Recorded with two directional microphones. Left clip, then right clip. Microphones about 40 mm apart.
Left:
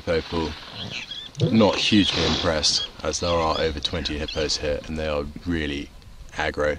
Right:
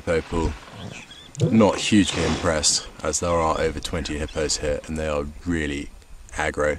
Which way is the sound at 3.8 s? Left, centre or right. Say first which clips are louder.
Left 2 dB; right.